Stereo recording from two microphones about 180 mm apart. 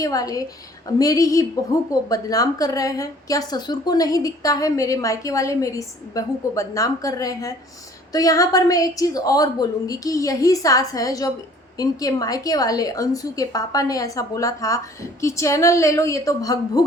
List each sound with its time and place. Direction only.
0.0 s a woman's voice: 20° left (ahead or behind)